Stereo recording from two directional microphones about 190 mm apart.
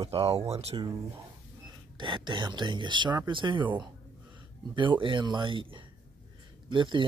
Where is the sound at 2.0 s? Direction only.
25° right (ahead or behind).